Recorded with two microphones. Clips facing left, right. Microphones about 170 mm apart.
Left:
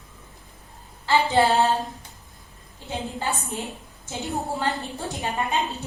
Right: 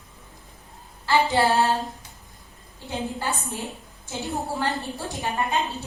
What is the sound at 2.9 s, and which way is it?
A woman's voice, 20° left (ahead or behind).